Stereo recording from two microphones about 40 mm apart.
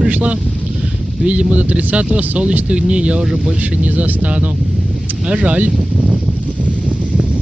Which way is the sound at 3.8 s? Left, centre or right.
Right.